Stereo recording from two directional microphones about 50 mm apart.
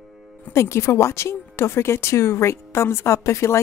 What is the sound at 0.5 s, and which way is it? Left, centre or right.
Speech, left.